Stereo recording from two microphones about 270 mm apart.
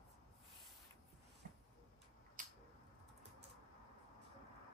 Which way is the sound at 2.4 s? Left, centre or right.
Right.